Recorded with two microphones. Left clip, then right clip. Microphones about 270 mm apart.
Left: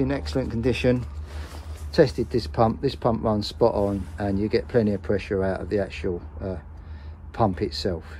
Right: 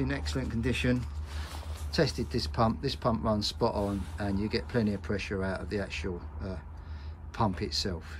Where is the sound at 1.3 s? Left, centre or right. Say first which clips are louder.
Left 1 dB; centre.